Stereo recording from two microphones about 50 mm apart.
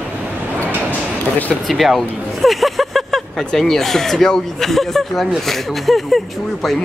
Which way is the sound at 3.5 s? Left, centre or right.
Centre.